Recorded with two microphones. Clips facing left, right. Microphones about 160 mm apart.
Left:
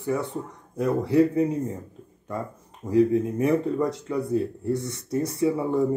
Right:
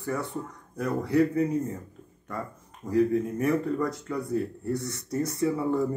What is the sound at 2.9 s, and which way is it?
Speech, 25° left (ahead or behind).